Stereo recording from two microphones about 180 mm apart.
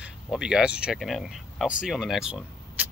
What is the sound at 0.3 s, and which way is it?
Speech, 5° right (ahead or behind).